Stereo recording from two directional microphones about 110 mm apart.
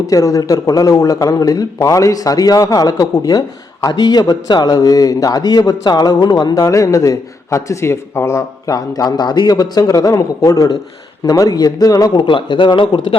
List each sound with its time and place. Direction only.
0.1 s speech: 30° left (ahead or behind); by 13.1 s 45° left (ahead or behind)